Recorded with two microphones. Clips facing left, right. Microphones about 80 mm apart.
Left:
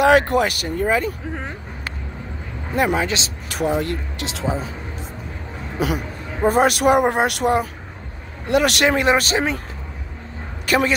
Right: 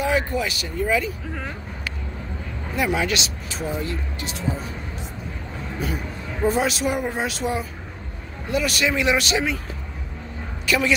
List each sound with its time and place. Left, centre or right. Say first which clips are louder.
0.0 s speech: left 8 dB; left
1.3 s vehicle: left 2 dB; left
2.7 s speech: left 4 dB; left
3.0 s speech: left 1 dB; left
3.4 s speech: left 10 dB; left
5.8 s a man's voice: left 7 dB; left
6.4 s speech: left 6 dB; left
8.9 s speech: left 3 dB; left
10.6 s a sound: left 4 dB; left